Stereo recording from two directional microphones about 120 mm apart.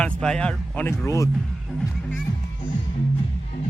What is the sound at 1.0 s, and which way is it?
Speech, 25° left (ahead or behind).